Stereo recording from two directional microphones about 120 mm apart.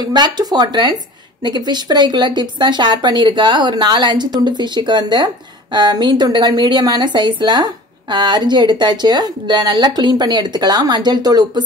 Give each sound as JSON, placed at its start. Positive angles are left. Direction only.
{"t": 0.0, "sound": "a woman's voice", "side_deg": -35}